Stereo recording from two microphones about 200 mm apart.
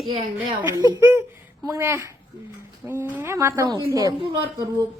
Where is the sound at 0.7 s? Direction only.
15° right (ahead or behind).